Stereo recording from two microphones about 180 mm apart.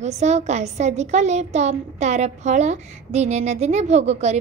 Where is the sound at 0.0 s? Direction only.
40° right (ahead or behind).